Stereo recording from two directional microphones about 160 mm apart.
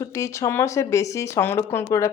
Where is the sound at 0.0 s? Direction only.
20° left (ahead or behind).